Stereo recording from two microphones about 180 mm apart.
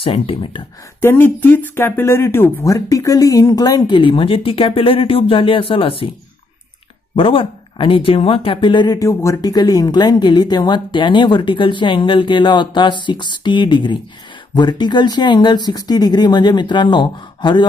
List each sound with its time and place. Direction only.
0.0 s speech: 30° left (ahead or behind)
1.0 s speech: 10° left (ahead or behind); by 6.0 s 30° left (ahead or behind)
7.2 s speech: 30° left (ahead or behind)